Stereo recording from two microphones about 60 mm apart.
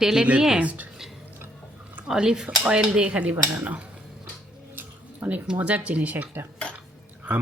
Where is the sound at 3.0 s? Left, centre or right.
Right.